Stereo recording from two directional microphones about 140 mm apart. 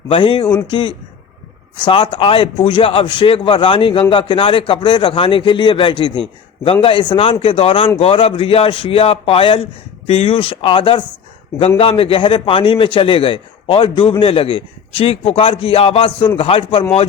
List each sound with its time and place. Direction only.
0.1 s a man's voice: 40° left (ahead or behind)